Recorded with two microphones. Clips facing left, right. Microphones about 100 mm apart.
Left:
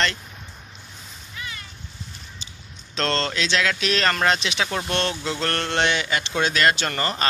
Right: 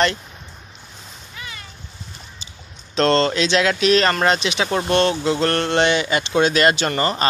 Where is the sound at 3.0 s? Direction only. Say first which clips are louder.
Right 8 dB; 25° right (ahead or behind).